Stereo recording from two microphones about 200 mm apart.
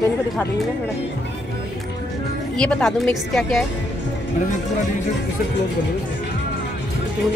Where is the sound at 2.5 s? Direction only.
5° left (ahead or behind).